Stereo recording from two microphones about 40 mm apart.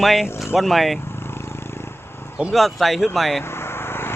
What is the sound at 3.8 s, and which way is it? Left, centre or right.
Vehicle, left.